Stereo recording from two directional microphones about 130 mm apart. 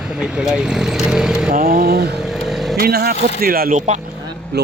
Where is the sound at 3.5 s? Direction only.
70° right (ahead or behind).